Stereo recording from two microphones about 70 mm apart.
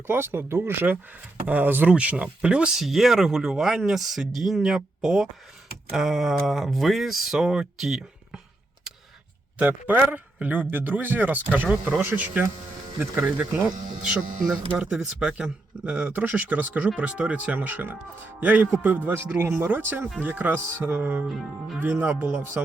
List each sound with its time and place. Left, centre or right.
0.1 s speech: right; by 2.8 s centre
2.8 s speech: centre
9.6 s speech: right
14.0 s speech: centre